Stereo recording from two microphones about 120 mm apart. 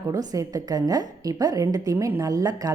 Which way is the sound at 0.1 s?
30° right (ahead or behind).